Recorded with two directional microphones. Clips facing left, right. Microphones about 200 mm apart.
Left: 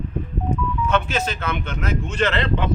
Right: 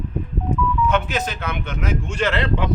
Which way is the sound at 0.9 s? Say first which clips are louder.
Even; 15° right (ahead or behind).